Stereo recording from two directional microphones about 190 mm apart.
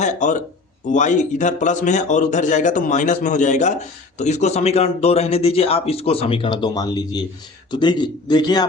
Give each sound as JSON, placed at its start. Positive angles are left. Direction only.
{"t": 0.0, "sound": "a man's voice", "side_deg": 40}